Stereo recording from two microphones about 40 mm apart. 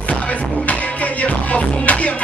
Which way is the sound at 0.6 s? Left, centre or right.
Left.